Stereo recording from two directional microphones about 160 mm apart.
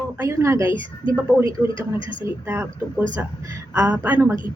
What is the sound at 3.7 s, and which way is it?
Speech, 10° right (ahead or behind).